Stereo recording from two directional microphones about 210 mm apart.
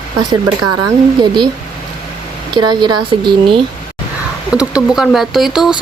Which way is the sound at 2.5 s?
20° right (ahead or behind).